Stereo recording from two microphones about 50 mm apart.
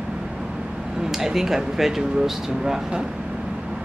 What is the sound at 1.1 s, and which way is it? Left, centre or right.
Speech, centre.